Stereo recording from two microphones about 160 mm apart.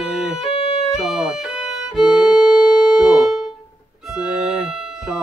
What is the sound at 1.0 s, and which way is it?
Violin, centre (ahead or behind).